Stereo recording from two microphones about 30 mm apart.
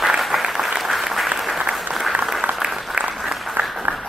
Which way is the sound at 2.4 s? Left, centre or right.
Right.